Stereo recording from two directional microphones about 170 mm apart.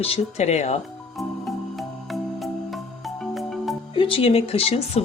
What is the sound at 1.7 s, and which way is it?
Music, centre (ahead or behind).